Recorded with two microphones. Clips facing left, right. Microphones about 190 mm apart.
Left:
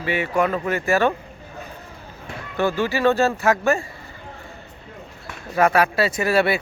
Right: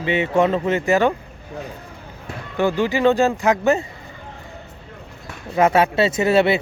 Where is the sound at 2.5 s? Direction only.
15° right (ahead or behind).